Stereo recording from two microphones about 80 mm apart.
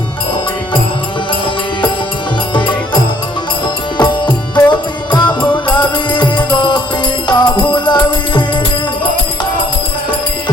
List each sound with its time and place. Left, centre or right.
3.9 s music: left